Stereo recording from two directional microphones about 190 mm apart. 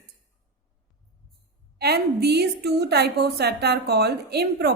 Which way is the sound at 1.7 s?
60° right (ahead or behind).